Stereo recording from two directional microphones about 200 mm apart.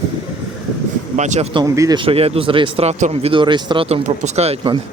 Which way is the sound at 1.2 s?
35° right (ahead or behind).